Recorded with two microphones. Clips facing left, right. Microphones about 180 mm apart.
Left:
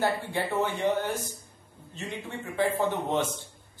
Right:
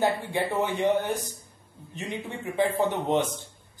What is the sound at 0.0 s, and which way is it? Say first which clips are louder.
A man's voice: right 2 dB; 15° right (ahead or behind).